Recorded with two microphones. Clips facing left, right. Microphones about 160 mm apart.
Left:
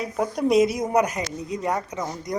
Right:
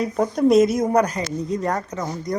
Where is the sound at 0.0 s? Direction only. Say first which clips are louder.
Right 5 dB; 10° left (ahead or behind).